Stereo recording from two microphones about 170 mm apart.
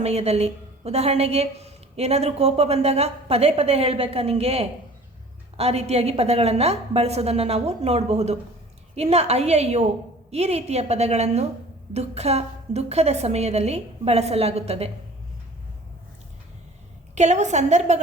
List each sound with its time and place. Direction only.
0.0 s a woman's voice: 40° right (ahead or behind)
17.2 s a woman's voice: 45° right (ahead or behind)